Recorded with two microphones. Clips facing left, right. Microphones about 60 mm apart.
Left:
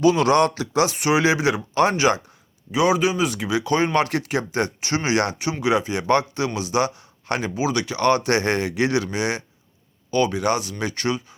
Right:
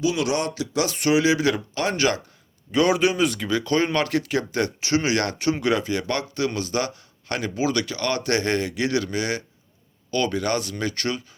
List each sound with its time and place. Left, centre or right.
0.0 s speech: left
0.6 s a man's voice: left
2.7 s speech: centre
3.9 s a man's voice: left